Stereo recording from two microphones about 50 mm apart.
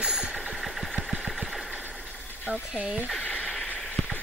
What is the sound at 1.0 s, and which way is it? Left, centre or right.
Engine, centre.